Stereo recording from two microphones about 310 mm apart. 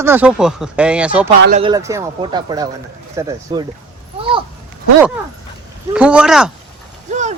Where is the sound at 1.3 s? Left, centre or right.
Right.